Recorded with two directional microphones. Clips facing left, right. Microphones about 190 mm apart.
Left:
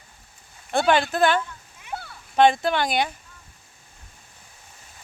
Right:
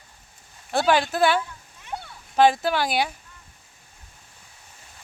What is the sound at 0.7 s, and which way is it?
A child's voice, 5° right (ahead or behind).